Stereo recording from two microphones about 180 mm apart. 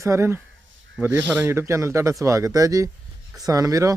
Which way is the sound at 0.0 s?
15° right (ahead or behind).